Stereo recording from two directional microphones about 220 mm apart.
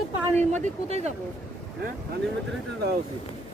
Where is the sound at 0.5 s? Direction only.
30° right (ahead or behind).